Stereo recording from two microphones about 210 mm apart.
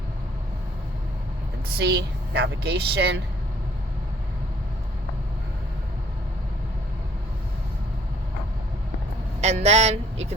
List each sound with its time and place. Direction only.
1.8 s a woman's voice: 55° right (ahead or behind)
9.4 s speech: 30° right (ahead or behind)